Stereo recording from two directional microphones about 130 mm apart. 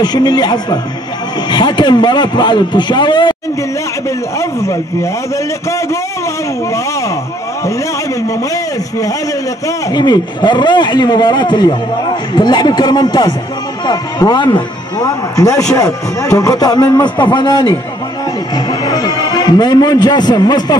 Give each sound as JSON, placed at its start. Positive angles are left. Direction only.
{"t": 0.0, "sound": "a man's voice", "side_deg": 35}
{"t": 4.4, "sound": "a man's voice", "side_deg": 25}
{"t": 9.7, "sound": "a man's voice", "side_deg": 30}